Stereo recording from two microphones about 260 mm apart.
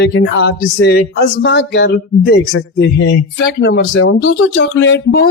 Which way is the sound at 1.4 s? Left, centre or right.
Left.